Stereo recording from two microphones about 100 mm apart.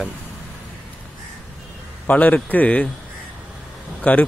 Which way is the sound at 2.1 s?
15° left (ahead or behind).